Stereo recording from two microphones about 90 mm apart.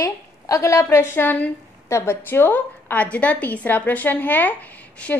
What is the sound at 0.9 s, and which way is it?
Speech, 25° left (ahead or behind).